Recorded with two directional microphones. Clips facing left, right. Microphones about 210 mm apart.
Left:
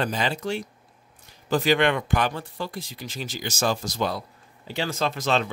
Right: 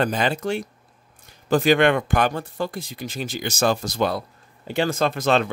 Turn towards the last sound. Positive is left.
turn(degrees=-55)  # may be behind; listen again after turning